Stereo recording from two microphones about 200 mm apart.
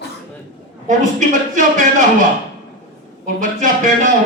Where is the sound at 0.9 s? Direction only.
40° right (ahead or behind).